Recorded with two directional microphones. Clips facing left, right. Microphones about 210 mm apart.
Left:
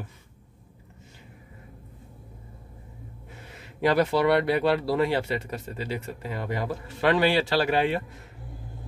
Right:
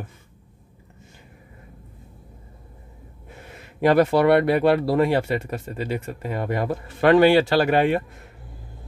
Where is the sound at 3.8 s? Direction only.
50° right (ahead or behind).